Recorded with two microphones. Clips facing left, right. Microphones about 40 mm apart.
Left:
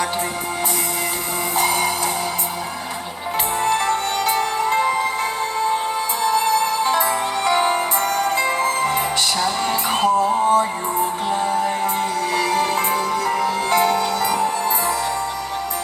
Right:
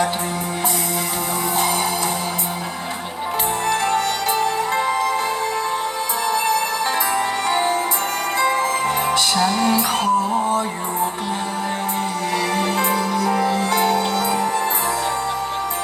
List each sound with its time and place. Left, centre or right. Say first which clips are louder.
4.3 s music: left 3 dB; left
6.8 s music: left 2 dB; right
7.4 s music: left 1 dB; left
12.4 s music: left 1 dB; left